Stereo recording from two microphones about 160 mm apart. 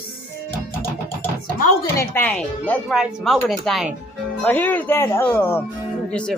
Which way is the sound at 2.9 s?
Centre (ahead or behind).